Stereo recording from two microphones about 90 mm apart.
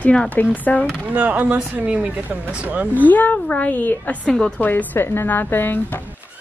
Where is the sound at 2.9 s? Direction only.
20° left (ahead or behind).